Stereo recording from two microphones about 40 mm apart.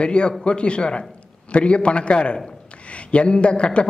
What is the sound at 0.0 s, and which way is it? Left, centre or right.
Speech, left.